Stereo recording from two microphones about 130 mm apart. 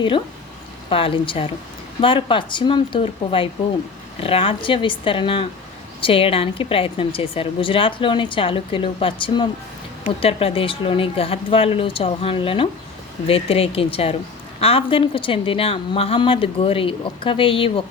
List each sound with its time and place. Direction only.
0.9 s a woman's voice: 45° left (ahead or behind)